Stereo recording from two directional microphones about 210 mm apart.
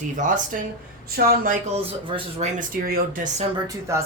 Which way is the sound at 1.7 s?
30° right (ahead or behind).